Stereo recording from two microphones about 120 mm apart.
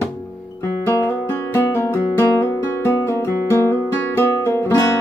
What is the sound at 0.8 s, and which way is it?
Music, 20° left (ahead or behind).